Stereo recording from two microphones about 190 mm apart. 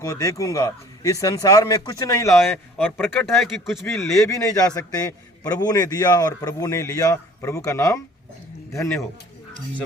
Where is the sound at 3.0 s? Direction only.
Centre (ahead or behind).